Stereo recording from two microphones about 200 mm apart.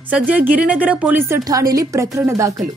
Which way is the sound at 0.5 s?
5° right (ahead or behind).